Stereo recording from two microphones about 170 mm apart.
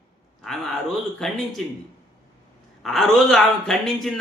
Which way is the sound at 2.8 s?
Centre (ahead or behind).